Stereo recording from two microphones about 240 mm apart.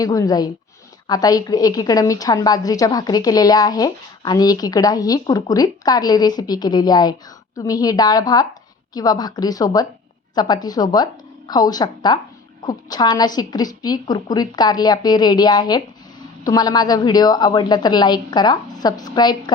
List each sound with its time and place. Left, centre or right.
0.0 s a woman's voice: centre